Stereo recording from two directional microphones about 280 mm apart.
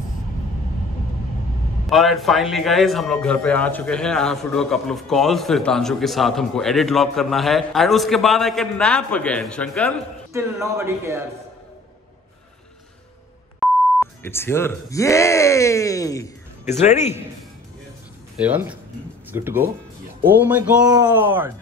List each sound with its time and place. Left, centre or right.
1.9 s a man's voice: centre
10.3 s speech: centre
13.6 s speech: centre
16.6 s speech: left
18.4 s a man's voice: centre